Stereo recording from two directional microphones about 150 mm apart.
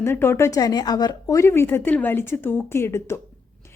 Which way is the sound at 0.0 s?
15° left (ahead or behind).